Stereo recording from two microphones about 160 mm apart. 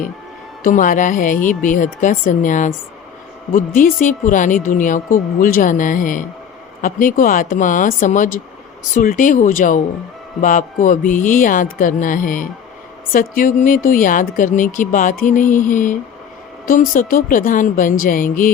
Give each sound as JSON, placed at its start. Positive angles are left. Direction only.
{"t": 0.6, "sound": "speech", "side_deg": 55}